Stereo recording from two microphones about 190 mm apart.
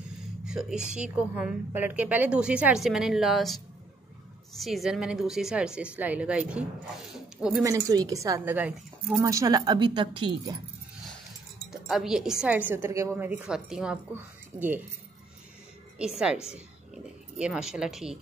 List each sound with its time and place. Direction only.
0.5 s speech: 5° right (ahead or behind)
7.6 s a woman's voice: 15° right (ahead or behind); by 9.2 s centre (ahead or behind)
9.2 s speech: 15° right (ahead or behind)
11.7 s a woman's voice: centre (ahead or behind)
16.0 s speech: 5° right (ahead or behind)